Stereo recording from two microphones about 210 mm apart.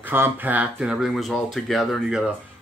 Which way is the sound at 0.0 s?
10° right (ahead or behind).